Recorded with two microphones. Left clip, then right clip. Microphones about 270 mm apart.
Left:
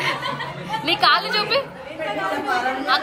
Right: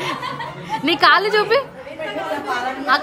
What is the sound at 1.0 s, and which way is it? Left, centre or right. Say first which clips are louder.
Speech: right 4 dB; right.